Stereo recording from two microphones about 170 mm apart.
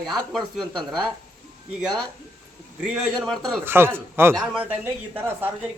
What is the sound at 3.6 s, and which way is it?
Speech, 15° right (ahead or behind).